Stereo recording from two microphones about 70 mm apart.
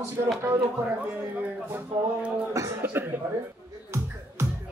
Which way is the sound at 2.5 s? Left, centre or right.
Right.